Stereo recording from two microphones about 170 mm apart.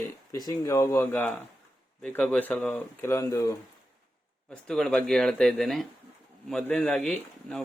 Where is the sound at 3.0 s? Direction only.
20° left (ahead or behind).